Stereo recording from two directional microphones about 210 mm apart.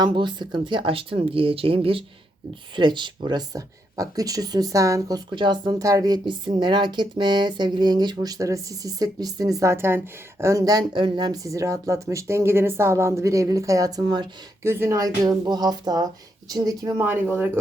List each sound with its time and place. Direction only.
0.0 s speech: 20° right (ahead or behind)